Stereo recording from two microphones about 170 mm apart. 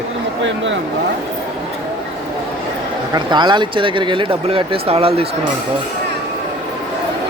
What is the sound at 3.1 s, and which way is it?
Speech, 25° right (ahead or behind).